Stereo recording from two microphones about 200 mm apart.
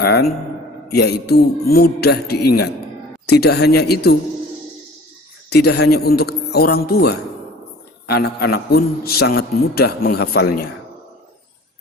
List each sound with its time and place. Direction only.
0.0 s a man's voice: 55° left (ahead or behind)
5.5 s a man's voice: 55° left (ahead or behind)